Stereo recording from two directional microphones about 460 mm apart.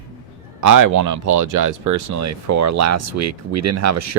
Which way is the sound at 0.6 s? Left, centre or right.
Right.